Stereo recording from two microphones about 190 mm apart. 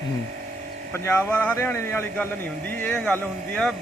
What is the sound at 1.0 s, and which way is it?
A man's voice, 10° left (ahead or behind).